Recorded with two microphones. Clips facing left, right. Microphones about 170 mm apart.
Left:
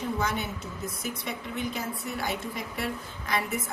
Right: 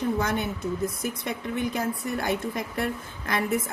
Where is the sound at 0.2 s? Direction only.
55° right (ahead or behind).